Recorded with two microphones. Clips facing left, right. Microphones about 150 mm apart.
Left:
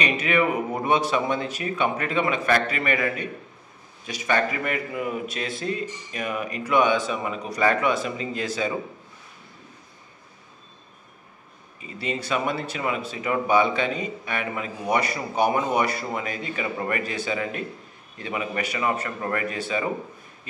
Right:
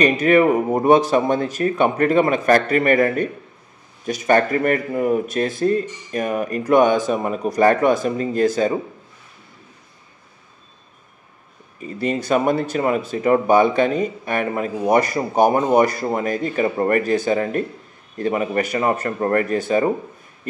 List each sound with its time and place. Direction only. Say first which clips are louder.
0.0 s speech: right 8 dB; 45° right (ahead or behind)
11.8 s speech: right 7 dB; 45° right (ahead or behind)